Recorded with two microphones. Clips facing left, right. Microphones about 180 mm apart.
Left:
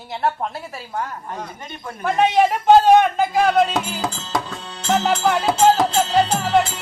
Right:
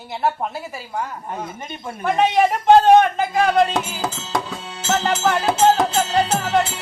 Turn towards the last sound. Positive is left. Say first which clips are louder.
# left 1 dB
turn(degrees=-5)  # may be behind; listen again after turning